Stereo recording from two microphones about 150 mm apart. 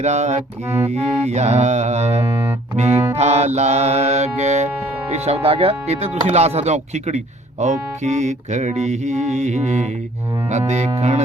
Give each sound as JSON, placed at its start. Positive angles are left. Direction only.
{"t": 0.0, "sound": "music", "side_deg": -50}
{"t": 2.9, "sound": "music", "side_deg": -15}
{"t": 3.2, "sound": "music", "side_deg": -50}